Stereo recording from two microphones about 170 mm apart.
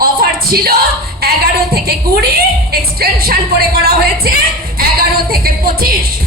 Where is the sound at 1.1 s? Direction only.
65° right (ahead or behind).